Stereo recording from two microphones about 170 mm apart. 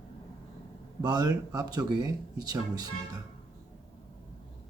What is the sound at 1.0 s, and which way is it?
Speech, 25° right (ahead or behind).